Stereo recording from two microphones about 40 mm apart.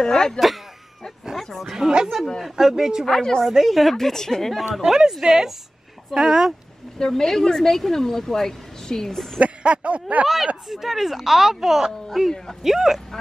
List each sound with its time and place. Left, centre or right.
0.0 s speech: centre
1.3 s a sound: centre
1.8 s speech: centre
3.1 s speech: centre
3.4 s speech: centre
3.9 s speech: centre
4.8 s speech: centre
7.0 s speech: centre
9.4 s speech: right
10.2 s speech: centre